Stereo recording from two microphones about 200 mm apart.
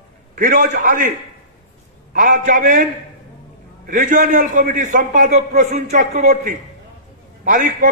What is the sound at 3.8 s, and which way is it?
A man's voice, 40° right (ahead or behind).